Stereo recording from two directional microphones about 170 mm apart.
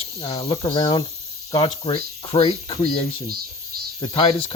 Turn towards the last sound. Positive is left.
turn(degrees=30)  # may be behind; listen again after turning